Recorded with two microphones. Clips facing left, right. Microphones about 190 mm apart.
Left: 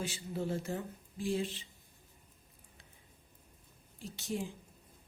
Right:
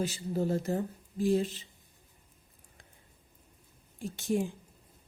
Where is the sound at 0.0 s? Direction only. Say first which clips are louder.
Right 6 dB; 40° right (ahead or behind).